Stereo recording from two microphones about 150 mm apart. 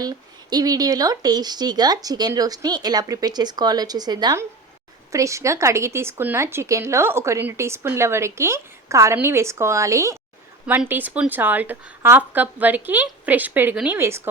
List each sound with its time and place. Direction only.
0.0 s speech: 25° right (ahead or behind)